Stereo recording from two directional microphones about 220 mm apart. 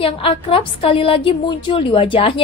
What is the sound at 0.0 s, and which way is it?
A woman's voice, 25° left (ahead or behind).